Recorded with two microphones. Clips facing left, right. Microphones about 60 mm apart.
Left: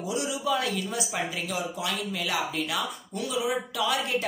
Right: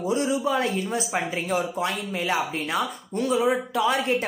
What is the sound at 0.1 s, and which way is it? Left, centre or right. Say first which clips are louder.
Speech: right 4 dB; right.